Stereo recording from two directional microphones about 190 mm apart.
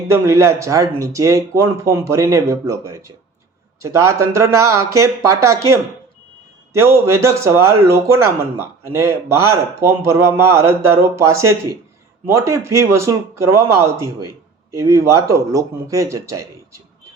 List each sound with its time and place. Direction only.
0.1 s speech: 15° right (ahead or behind)